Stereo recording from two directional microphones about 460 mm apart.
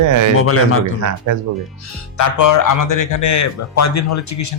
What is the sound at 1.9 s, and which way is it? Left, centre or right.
Speech, left.